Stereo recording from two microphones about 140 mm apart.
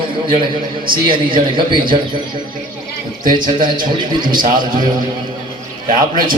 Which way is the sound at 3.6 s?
35° right (ahead or behind).